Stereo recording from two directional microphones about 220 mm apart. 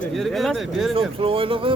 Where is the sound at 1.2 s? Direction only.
25° right (ahead or behind).